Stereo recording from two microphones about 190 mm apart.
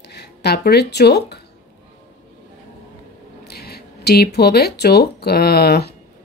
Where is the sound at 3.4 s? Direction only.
55° left (ahead or behind).